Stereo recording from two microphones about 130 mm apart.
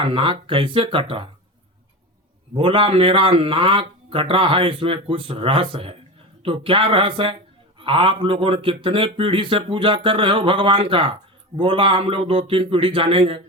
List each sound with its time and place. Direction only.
0.0 s speech: 45° right (ahead or behind)
2.6 s speech: 40° right (ahead or behind)